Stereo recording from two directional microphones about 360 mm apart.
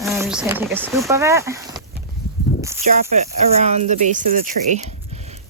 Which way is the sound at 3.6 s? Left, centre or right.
Centre.